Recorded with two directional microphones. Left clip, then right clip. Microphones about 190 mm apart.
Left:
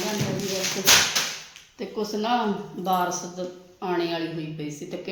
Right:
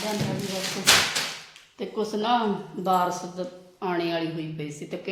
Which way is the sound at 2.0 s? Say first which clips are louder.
Right 1 dB; 20° right (ahead or behind).